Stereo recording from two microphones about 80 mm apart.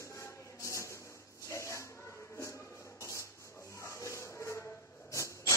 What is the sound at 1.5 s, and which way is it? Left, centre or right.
Dog, left.